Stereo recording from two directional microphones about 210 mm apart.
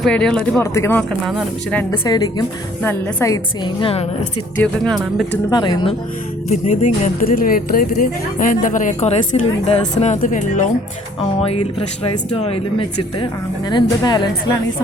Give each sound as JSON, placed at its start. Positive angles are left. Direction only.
{"t": 0.0, "sound": "speech", "side_deg": 5}
{"t": 1.9, "sound": "a woman's voice", "side_deg": 20}
{"t": 4.5, "sound": "speech", "side_deg": 5}
{"t": 5.5, "sound": "a woman's voice", "side_deg": 20}
{"t": 6.5, "sound": "a woman's voice", "side_deg": 35}
{"t": 12.0, "sound": "a woman's voice", "side_deg": 30}
{"t": 13.7, "sound": "a woman's voice", "side_deg": 20}